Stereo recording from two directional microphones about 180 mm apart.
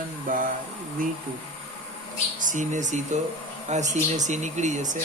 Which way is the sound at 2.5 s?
45° right (ahead or behind).